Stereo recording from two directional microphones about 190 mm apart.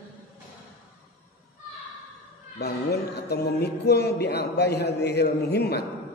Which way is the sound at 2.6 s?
60° left (ahead or behind).